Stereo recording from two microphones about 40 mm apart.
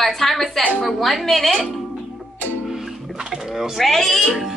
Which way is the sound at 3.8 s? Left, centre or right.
Centre.